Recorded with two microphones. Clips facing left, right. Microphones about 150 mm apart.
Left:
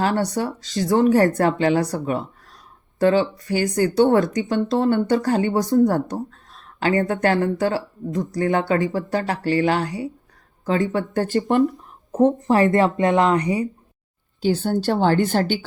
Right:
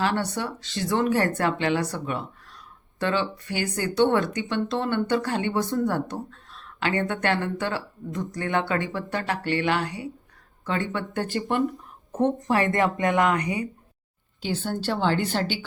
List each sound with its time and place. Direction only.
0.0 s a woman's voice: 40° left (ahead or behind)